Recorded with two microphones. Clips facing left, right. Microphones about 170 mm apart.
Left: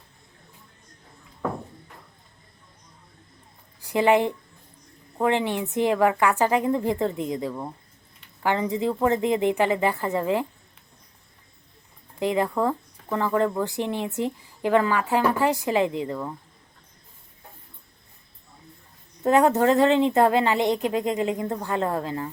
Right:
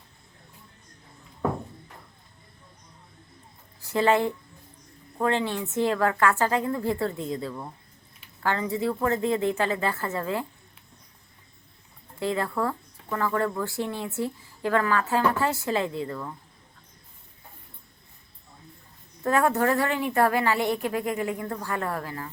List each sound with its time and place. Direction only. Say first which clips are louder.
3.8 s speech: left 3 dB; 15° left (ahead or behind)
12.2 s speech: left 4 dB; 15° left (ahead or behind)
19.2 s a woman's voice: left 4 dB; 20° left (ahead or behind)